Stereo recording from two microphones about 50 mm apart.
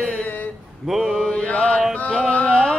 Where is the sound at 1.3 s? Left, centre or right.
Left.